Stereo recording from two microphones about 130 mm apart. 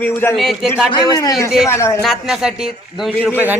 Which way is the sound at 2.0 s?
Centre (ahead or behind).